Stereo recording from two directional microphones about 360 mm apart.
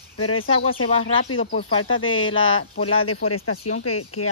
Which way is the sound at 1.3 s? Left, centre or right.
Left.